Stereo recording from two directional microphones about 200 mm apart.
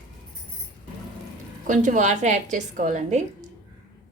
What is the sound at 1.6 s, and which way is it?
A woman's voice, 40° right (ahead or behind).